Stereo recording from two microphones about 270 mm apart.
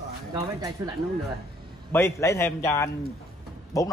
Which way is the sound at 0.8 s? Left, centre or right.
Centre.